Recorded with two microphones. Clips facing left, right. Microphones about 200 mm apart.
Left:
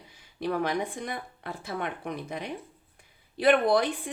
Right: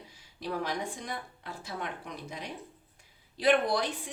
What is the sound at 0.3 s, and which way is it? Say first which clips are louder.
Speech: left 6 dB; 60° left (ahead or behind).